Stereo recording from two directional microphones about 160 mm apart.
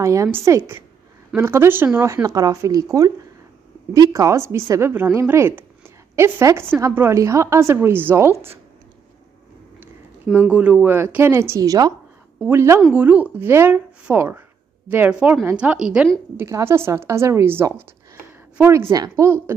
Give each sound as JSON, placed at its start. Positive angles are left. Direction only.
{"t": 0.0, "sound": "a woman's voice", "side_deg": -20}
{"t": 10.5, "sound": "a woman's voice", "side_deg": -10}
{"t": 16.3, "sound": "a woman's voice", "side_deg": -15}